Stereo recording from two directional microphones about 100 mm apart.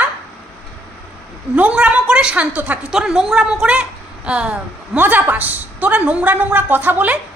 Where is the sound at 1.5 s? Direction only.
10° right (ahead or behind).